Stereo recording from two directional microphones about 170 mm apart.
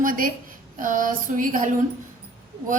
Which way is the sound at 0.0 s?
55° right (ahead or behind).